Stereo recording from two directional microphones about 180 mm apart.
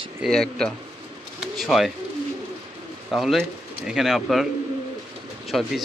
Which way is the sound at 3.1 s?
Centre (ahead or behind).